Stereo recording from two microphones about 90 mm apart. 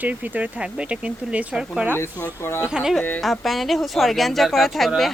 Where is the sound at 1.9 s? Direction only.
25° left (ahead or behind).